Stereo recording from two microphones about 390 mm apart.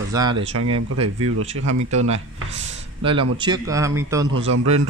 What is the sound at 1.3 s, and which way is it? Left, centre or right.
Speech, right.